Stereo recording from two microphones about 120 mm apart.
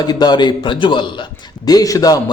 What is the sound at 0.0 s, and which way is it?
A man's voice, 35° left (ahead or behind).